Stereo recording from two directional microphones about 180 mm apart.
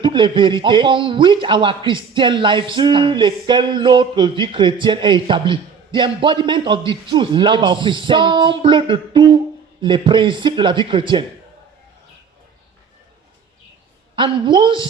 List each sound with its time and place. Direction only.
0.0 s a man's voice: 25° right (ahead or behind)
14.2 s a man's voice: 25° right (ahead or behind)